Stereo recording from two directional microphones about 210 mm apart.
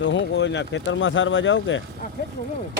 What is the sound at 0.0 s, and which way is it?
Speech, 60° left (ahead or behind).